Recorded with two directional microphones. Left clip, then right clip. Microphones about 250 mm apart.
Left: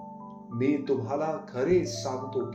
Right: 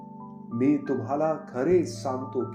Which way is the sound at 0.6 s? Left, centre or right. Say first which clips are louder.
Right 1 dB; right.